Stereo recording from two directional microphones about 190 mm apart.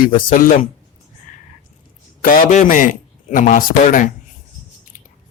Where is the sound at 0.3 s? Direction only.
45° left (ahead or behind).